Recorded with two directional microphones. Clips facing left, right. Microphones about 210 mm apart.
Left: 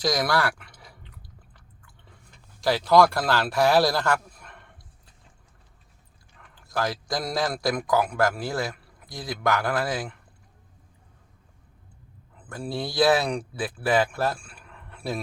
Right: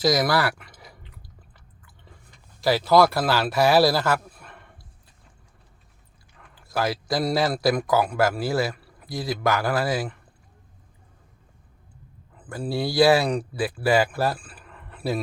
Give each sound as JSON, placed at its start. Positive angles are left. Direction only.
{"t": 0.0, "sound": "a sound", "side_deg": -5}
{"t": 1.5, "sound": "chewing", "side_deg": -5}
{"t": 2.6, "sound": "speech", "side_deg": -5}
{"t": 6.5, "sound": "a man's voice", "side_deg": -5}
{"t": 12.5, "sound": "speech", "side_deg": -5}